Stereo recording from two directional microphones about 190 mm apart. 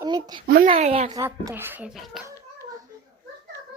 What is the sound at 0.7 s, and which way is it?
Speech, 35° right (ahead or behind).